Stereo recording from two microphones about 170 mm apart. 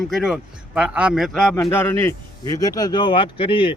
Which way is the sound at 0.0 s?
Centre (ahead or behind).